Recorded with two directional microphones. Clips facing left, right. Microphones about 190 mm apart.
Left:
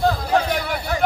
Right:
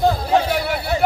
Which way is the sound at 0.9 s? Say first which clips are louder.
Right 2 dB; 25° right (ahead or behind).